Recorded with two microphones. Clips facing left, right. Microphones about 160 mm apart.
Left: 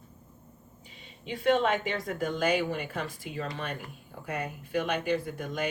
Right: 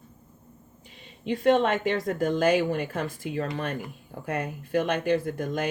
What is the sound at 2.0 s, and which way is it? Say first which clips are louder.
Speech: right 5 dB; 45° right (ahead or behind).